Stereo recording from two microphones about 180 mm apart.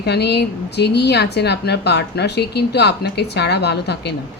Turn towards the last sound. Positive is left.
turn(degrees=65)  # may be behind; listen again after turning